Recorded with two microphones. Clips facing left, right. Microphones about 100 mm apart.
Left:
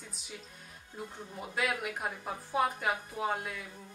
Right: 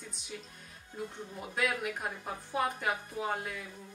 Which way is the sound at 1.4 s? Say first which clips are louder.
Even; centre (ahead or behind).